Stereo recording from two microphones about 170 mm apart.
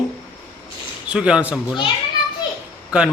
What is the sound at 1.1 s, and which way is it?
Speech, 5° right (ahead or behind).